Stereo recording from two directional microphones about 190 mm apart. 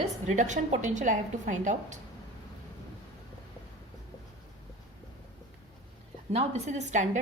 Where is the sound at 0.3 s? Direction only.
40° right (ahead or behind).